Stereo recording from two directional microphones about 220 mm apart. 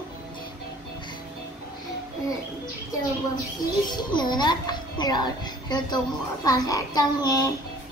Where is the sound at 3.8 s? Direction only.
20° left (ahead or behind).